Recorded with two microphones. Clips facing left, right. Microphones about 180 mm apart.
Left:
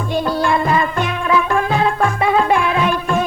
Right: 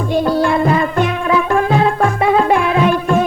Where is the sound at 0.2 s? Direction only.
40° right (ahead or behind).